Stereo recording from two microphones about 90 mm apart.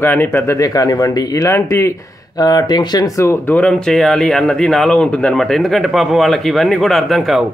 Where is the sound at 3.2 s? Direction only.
30° left (ahead or behind).